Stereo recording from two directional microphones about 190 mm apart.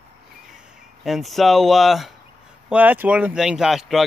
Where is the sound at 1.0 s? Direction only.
Centre (ahead or behind).